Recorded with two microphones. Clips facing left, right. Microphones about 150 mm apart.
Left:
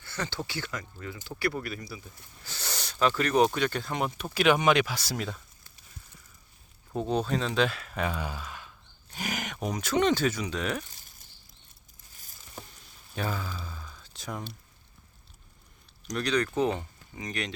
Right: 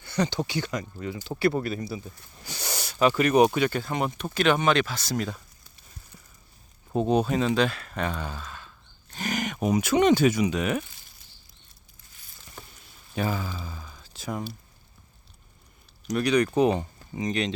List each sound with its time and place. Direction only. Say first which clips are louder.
0.0 s speech: right 8 dB; 15° right (ahead or behind)
2.4 s speech: right 4 dB; 15° right (ahead or behind); by 5.4 s 5° left (ahead or behind)
6.9 s speech: right 5 dB; 15° right (ahead or behind)
13.1 s a sound: right 4 dB; 5° right (ahead or behind)
16.0 s speech: right 5 dB; 10° right (ahead or behind)